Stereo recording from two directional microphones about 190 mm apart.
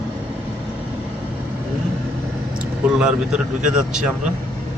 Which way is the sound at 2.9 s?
5° right (ahead or behind).